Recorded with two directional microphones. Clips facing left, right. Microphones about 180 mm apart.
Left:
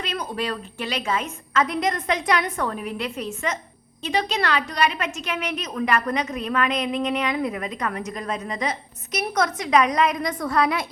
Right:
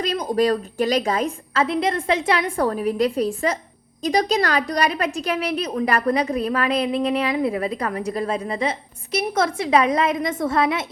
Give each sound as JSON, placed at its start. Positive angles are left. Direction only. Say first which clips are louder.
{"t": 0.3, "sound": "a woman's voice", "louder": "right 9 dB", "side_deg": -40}